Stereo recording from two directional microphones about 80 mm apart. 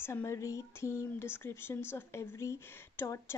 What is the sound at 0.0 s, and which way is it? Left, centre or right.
Speech, left.